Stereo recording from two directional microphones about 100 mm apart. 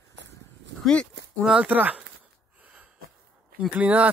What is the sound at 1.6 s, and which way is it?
Speech, 15° right (ahead or behind).